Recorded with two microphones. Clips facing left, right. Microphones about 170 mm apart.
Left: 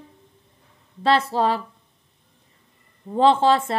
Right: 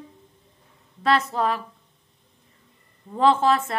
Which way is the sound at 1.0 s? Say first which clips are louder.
Left 2 dB; 30° left (ahead or behind).